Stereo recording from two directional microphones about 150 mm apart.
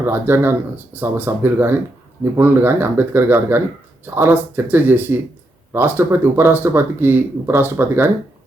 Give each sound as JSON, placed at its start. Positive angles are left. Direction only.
{"t": 0.0, "sound": "speech", "side_deg": -15}